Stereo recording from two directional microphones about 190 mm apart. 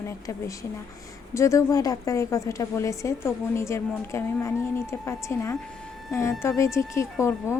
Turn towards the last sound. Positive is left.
turn(degrees=15)  # may be behind; listen again after turning